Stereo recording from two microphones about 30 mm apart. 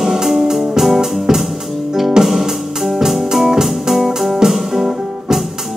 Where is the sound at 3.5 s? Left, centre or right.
Centre.